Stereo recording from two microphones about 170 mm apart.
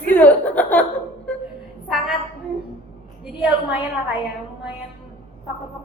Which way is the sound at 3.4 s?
10° right (ahead or behind).